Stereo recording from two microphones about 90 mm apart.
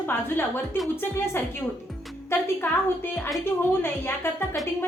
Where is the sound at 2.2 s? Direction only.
25° left (ahead or behind).